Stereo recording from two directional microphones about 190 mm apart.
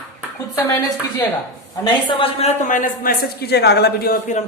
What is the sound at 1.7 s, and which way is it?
A man's voice, 25° left (ahead or behind).